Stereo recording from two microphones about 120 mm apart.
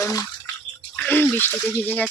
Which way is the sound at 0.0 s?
30° left (ahead or behind).